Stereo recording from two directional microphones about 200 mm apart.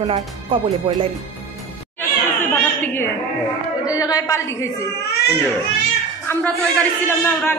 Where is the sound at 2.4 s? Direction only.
10° left (ahead or behind).